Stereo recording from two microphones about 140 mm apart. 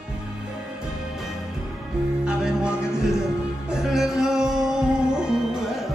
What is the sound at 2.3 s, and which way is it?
Music, 5° right (ahead or behind).